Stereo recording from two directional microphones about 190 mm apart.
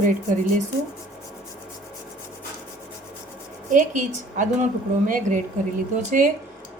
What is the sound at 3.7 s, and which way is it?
A woman's voice, 40° right (ahead or behind).